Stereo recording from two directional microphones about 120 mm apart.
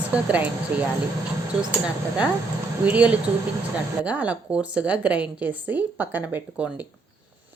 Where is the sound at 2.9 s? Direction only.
10° right (ahead or behind).